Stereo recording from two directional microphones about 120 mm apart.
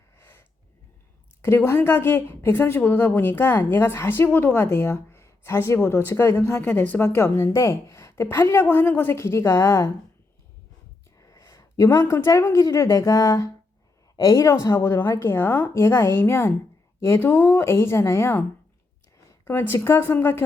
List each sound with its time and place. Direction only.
0.2 s a sound: 20° left (ahead or behind)
1.4 s a woman's voice: 20° left (ahead or behind)
11.2 s a woman's voice: 30° left (ahead or behind)
19.5 s a woman's voice: 20° left (ahead or behind)